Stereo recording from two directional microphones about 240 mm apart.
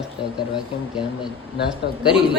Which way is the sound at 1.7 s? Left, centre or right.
Centre.